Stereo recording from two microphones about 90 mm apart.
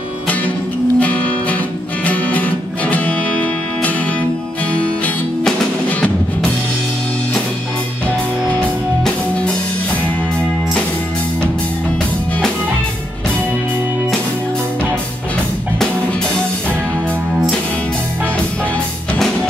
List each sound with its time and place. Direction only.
0.9 s music: 15° left (ahead or behind)
5.9 s music: 15° left (ahead or behind)
8.5 s music: 10° left (ahead or behind)